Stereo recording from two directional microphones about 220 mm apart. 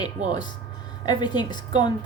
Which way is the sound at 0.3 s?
20° left (ahead or behind).